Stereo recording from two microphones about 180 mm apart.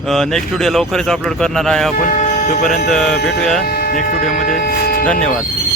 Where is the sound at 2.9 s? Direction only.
5° left (ahead or behind).